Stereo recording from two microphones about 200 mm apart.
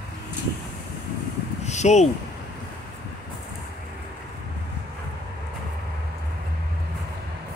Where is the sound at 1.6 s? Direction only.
35° left (ahead or behind).